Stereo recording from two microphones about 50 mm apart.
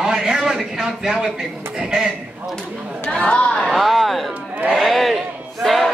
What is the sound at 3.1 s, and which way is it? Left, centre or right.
Speech, left.